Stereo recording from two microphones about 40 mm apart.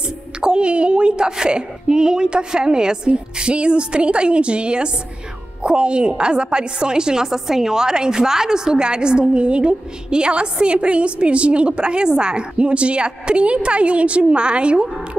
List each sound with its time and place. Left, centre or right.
0.4 s a woman's voice: right